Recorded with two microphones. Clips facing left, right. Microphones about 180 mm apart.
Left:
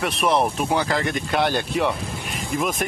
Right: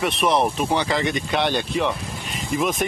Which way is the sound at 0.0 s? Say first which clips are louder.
Right 1 dB; centre (ahead or behind).